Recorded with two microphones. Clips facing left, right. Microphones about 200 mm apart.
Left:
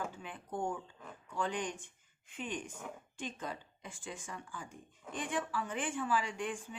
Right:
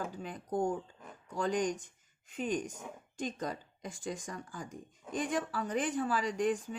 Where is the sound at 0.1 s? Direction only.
40° right (ahead or behind).